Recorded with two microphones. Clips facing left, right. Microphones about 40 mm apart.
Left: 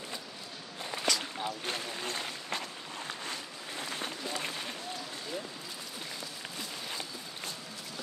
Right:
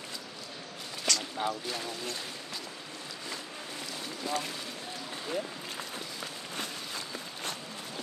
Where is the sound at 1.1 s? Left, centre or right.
Centre.